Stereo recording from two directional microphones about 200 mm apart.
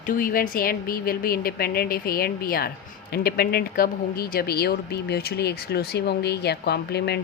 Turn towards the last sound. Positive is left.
turn(degrees=55)  # may be behind; listen again after turning